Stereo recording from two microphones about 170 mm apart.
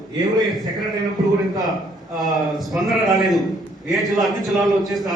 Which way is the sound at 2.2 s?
Centre (ahead or behind).